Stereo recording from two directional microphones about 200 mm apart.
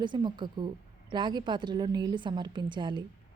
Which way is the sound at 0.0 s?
20° right (ahead or behind).